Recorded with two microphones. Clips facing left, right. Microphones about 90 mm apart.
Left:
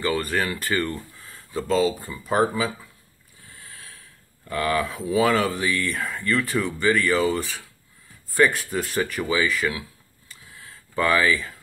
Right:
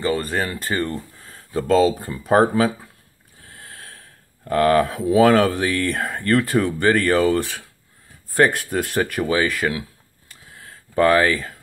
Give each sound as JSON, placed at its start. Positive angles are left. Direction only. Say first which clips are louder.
{"t": 0.0, "sound": "speech", "louder": "right 2 dB", "side_deg": -30}
{"t": 1.5, "sound": "speech", "louder": "right 5 dB", "side_deg": -55}
{"t": 10.6, "sound": "a sound", "louder": "right 7 dB", "side_deg": -50}